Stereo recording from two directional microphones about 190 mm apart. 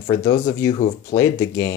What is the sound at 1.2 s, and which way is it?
Speech, 15° left (ahead or behind).